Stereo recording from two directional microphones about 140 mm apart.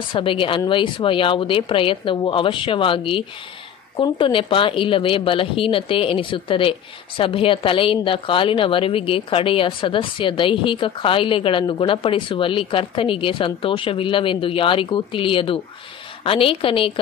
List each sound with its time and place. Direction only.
0.1 s speech: 40° left (ahead or behind)